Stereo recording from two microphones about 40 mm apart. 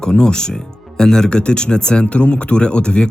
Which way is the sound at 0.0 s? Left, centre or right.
Left.